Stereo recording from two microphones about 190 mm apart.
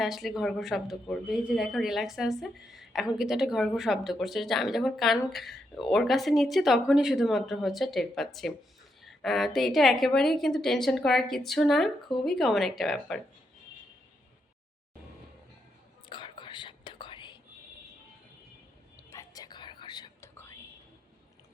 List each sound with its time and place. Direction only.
0.0 s speech: centre (ahead or behind)
16.0 s whispering: 25° left (ahead or behind)
19.1 s whispering: 20° left (ahead or behind)